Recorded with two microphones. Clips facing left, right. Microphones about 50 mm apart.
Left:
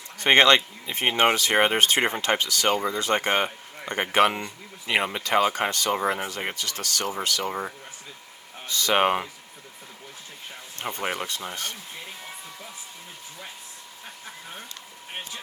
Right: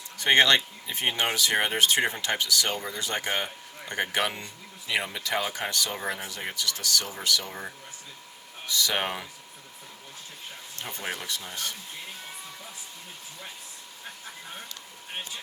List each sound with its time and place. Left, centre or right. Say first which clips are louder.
0.2 s speech: left 3 dB; left
10.8 s speech: left 6 dB; left